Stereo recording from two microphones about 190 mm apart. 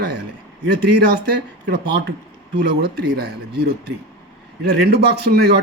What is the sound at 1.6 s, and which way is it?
A man's voice, 65° right (ahead or behind).